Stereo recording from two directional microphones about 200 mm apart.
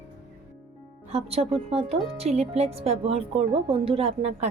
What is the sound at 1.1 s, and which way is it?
A woman's voice, 30° right (ahead or behind).